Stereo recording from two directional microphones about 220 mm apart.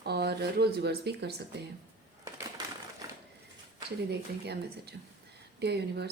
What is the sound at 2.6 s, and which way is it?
Crumpling, 20° right (ahead or behind).